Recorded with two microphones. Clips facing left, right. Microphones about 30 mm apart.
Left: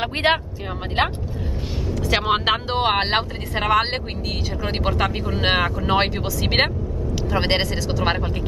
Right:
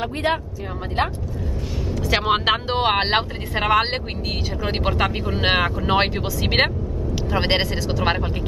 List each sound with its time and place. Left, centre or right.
0.0 s speech: left
1.9 s speech: centre